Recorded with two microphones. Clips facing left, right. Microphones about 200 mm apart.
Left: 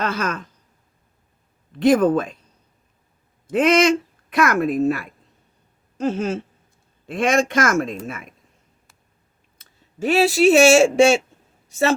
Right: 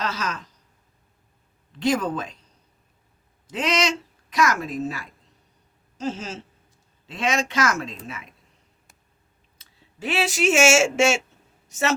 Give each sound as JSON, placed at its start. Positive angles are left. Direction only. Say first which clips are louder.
{"t": 0.0, "sound": "speech", "louder": "left 5 dB", "side_deg": 55}
{"t": 1.7, "sound": "speech", "louder": "left 8 dB", "side_deg": 55}
{"t": 3.4, "sound": "a woman's voice", "louder": "left 9 dB", "side_deg": 55}
{"t": 9.6, "sound": "speech", "louder": "left 9 dB", "side_deg": 45}